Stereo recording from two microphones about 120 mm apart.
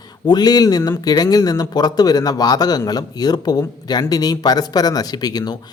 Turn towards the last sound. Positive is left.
turn(degrees=35)  # may be behind; listen again after turning